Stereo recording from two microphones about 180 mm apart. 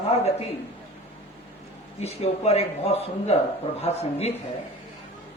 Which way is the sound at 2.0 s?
35° left (ahead or behind).